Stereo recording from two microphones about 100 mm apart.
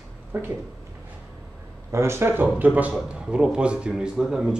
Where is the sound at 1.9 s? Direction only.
25° right (ahead or behind).